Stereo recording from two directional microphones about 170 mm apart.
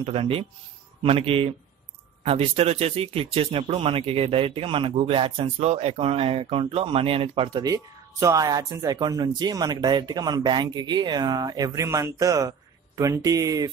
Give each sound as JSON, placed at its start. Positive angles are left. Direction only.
{"t": 0.0, "sound": "speech", "side_deg": -35}